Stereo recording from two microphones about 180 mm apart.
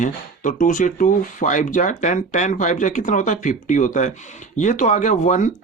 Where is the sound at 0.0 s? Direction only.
45° left (ahead or behind).